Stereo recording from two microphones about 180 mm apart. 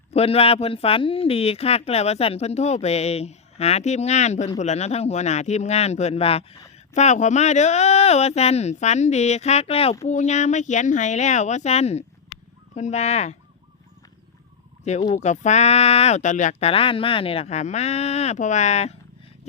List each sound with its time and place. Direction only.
0.1 s speech: 35° left (ahead or behind)
15.1 s speech: 40° left (ahead or behind)